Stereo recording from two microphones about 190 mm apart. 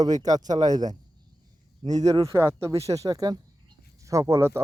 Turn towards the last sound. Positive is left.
turn(degrees=-15)  # may be behind; listen again after turning